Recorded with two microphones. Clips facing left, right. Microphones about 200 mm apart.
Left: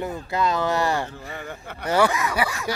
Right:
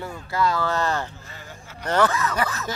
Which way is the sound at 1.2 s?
60° left (ahead or behind).